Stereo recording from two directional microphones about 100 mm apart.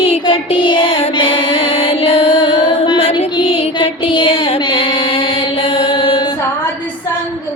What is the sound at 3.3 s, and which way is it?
Music, 75° left (ahead or behind).